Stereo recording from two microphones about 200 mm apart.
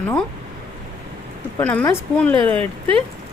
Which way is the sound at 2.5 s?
25° right (ahead or behind).